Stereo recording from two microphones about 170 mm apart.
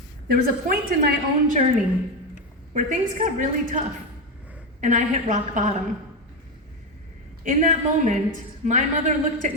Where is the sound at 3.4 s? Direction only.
50° right (ahead or behind).